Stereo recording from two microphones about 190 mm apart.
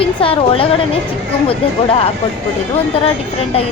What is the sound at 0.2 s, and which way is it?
Speech, 30° left (ahead or behind).